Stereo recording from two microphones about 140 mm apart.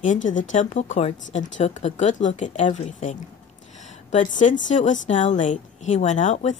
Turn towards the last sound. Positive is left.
turn(degrees=55)  # may be behind; listen again after turning